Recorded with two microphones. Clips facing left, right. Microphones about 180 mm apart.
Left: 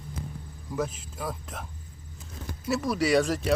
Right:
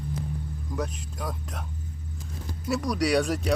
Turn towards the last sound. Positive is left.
turn(degrees=0)  # may be behind; listen again after turning